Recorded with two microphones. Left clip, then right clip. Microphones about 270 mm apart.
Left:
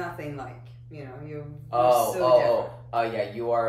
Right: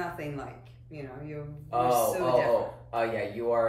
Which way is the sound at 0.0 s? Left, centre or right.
Centre.